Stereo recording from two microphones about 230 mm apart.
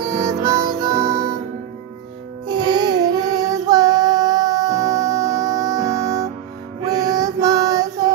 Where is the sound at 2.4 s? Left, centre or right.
Centre.